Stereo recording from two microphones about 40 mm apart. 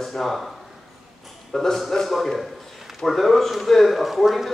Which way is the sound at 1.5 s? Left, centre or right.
Centre.